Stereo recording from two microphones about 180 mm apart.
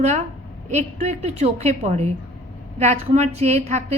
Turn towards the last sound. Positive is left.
turn(degrees=-40)  # may be behind; listen again after turning